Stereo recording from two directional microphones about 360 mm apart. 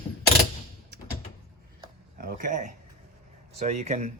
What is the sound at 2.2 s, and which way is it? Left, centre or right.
Speech, right.